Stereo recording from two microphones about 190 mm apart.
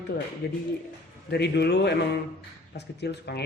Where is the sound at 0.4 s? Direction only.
60° left (ahead or behind).